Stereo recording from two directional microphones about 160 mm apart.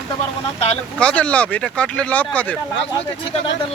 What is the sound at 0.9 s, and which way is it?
Speech, 5° left (ahead or behind).